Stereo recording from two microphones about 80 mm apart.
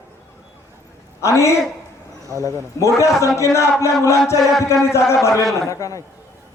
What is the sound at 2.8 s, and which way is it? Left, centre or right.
A man's voice, left.